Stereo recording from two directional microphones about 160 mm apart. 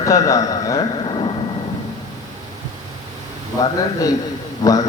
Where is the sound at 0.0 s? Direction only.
20° left (ahead or behind).